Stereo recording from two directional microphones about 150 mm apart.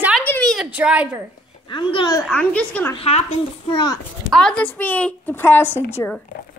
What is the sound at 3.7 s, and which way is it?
Speech, 25° left (ahead or behind).